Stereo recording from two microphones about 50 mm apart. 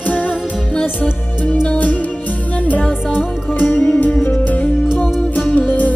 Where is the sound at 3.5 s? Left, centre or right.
Left.